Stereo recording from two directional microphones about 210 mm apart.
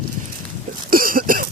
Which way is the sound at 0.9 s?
40° right (ahead or behind).